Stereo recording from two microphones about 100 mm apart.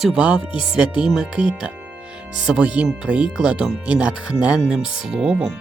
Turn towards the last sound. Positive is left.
turn(degrees=-5)  # may be behind; listen again after turning